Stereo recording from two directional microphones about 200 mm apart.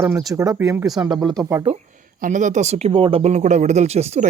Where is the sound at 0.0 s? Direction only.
10° right (ahead or behind).